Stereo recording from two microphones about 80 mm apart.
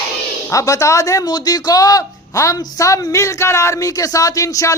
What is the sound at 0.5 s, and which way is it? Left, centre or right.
Speech, left.